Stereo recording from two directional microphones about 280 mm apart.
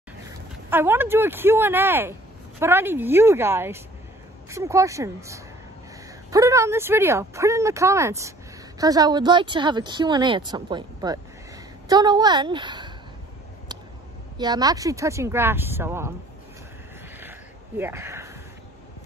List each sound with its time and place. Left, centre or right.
0.7 s speech: centre
14.3 s speech: centre
17.2 s a sound: centre